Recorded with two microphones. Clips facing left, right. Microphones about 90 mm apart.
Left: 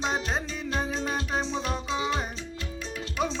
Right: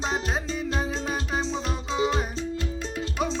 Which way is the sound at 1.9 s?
35° right (ahead or behind).